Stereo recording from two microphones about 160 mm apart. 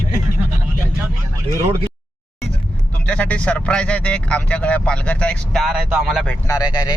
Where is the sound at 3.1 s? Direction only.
10° left (ahead or behind).